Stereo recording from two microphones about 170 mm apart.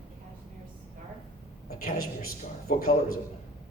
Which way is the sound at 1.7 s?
60° left (ahead or behind).